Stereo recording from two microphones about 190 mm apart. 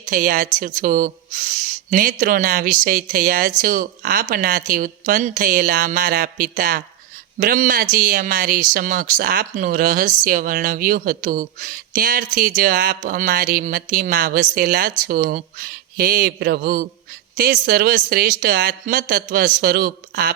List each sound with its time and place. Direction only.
0.0 s speech: 45° right (ahead or behind)